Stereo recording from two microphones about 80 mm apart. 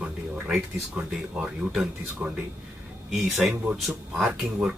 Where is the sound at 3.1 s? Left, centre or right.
Centre.